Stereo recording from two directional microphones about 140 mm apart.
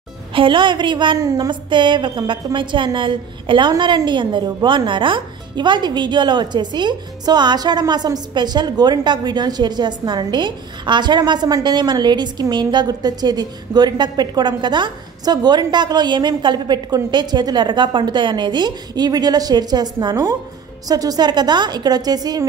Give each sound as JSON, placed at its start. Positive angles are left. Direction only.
{"t": 0.3, "sound": "a woman's voice", "side_deg": -35}